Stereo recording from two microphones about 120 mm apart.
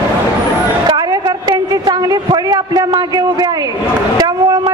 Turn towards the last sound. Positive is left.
turn(degrees=-30)  # may be behind; listen again after turning